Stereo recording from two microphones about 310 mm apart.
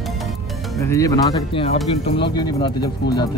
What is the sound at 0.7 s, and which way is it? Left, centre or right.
Speech, centre.